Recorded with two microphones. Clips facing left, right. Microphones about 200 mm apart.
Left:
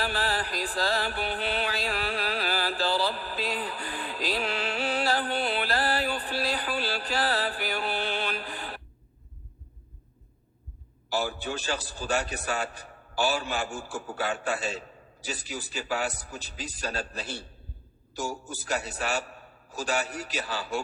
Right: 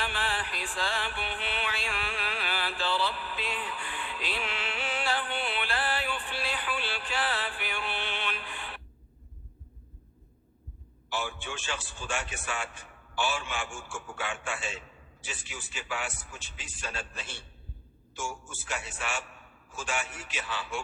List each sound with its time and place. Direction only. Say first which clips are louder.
0.0 s music: left 4 dB; 40° left (ahead or behind)
11.1 s a man's voice: left 6 dB; 40° left (ahead or behind)